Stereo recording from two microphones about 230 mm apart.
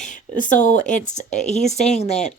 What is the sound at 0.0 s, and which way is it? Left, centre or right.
Speech, left.